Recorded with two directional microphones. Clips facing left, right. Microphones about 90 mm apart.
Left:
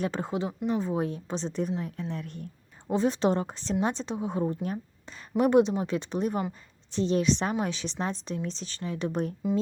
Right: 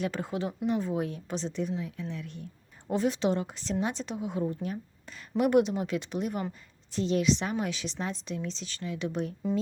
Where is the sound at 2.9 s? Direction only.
30° left (ahead or behind).